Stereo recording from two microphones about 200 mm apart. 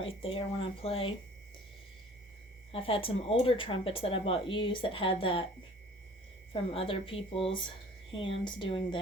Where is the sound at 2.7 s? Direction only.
25° left (ahead or behind).